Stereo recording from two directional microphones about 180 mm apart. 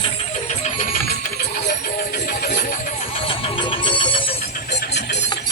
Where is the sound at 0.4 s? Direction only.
40° left (ahead or behind).